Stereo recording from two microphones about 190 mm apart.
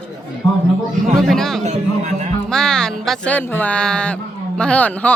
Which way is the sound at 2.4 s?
5° left (ahead or behind).